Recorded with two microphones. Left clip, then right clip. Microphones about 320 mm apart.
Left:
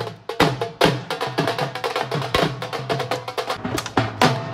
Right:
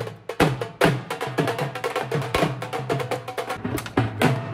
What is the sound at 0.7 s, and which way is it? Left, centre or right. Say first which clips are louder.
Music: left 2 dB; centre.